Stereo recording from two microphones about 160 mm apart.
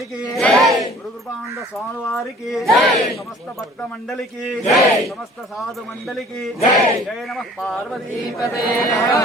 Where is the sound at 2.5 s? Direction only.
Centre (ahead or behind).